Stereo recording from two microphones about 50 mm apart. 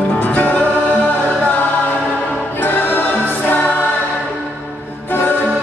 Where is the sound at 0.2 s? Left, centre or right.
Left.